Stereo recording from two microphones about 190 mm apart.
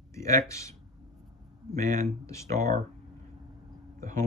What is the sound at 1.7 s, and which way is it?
Speech, 40° right (ahead or behind).